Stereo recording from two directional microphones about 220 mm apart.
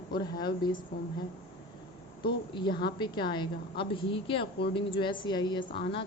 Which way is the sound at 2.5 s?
20° left (ahead or behind).